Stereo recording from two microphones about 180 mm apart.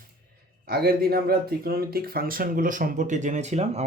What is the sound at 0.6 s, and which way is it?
Speech, 55° right (ahead or behind).